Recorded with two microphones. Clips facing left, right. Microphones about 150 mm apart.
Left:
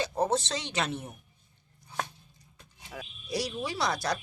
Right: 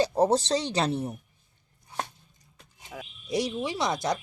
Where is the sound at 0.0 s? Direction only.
35° right (ahead or behind).